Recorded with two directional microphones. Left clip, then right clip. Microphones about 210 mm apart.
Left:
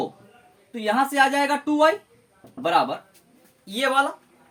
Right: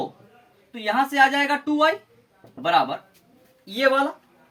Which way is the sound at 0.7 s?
10° left (ahead or behind).